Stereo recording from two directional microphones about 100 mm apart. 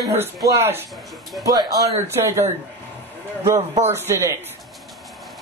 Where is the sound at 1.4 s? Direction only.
40° right (ahead or behind).